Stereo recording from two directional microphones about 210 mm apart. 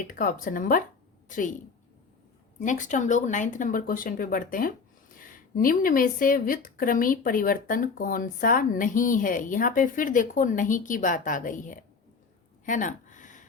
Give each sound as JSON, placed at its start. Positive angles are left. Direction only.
{"t": 0.1, "sound": "speech", "side_deg": 40}
{"t": 2.6, "sound": "speech", "side_deg": 35}
{"t": 12.6, "sound": "a sound", "side_deg": 35}